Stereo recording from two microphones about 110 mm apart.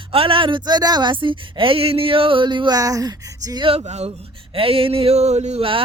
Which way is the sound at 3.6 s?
60° right (ahead or behind).